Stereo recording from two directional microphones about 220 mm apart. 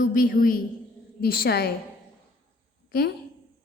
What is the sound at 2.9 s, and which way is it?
Speech, 45° left (ahead or behind).